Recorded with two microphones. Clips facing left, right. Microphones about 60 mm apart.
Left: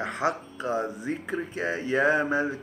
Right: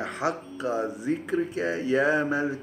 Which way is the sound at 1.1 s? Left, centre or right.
Centre.